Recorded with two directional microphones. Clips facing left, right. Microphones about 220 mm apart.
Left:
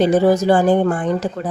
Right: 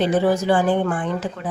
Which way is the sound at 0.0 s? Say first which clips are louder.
Left 5 dB; 40° left (ahead or behind).